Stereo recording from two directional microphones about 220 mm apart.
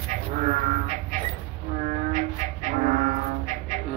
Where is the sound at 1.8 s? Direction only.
35° right (ahead or behind).